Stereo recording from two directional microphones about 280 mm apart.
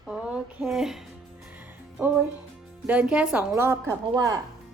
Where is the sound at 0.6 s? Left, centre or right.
Centre.